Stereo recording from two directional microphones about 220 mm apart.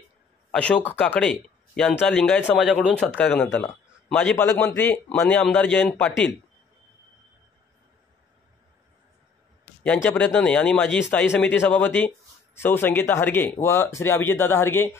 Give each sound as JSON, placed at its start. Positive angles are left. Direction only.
{"t": 0.5, "sound": "a man's voice", "side_deg": 5}
{"t": 9.8, "sound": "a man's voice", "side_deg": 5}